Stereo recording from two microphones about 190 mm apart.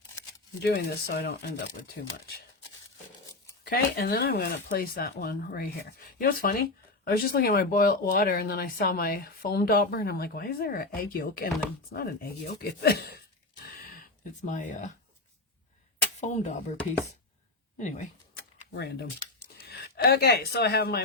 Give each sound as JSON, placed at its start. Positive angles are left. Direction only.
{"t": 0.6, "sound": "speech", "side_deg": 60}
{"t": 3.6, "sound": "speech", "side_deg": 55}
{"t": 13.6, "sound": "a sound", "side_deg": 50}
{"t": 14.4, "sound": "speech", "side_deg": 40}
{"t": 16.2, "sound": "speech", "side_deg": 40}
{"t": 17.7, "sound": "speech", "side_deg": 40}
{"t": 19.6, "sound": "speech", "side_deg": 55}